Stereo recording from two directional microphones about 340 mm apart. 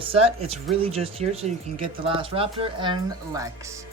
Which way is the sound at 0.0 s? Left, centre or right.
Centre.